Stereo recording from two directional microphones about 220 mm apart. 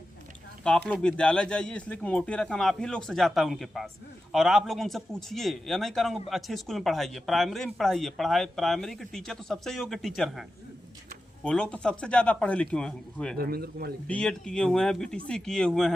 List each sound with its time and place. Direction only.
0.6 s a man's voice: 5° left (ahead or behind)
11.4 s a man's voice: 5° left (ahead or behind)
13.3 s speech: 45° right (ahead or behind)
14.1 s a man's voice: 5° left (ahead or behind)